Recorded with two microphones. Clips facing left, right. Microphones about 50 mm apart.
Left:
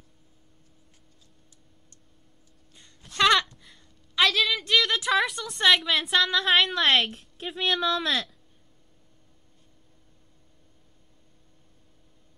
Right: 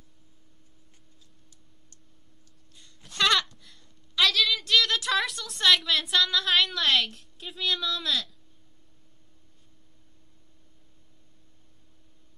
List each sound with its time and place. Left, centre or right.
3.2 s a sound: centre
6.8 s a woman's voice: left
7.3 s speech: left
8.0 s speech: left